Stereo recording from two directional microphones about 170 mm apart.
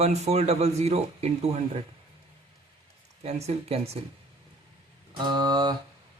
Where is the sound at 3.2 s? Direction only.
40° right (ahead or behind).